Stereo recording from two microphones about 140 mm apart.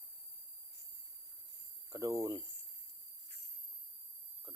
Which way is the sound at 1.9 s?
25° right (ahead or behind).